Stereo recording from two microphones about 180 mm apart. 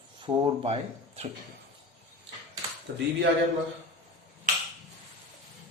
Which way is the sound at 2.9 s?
55° right (ahead or behind).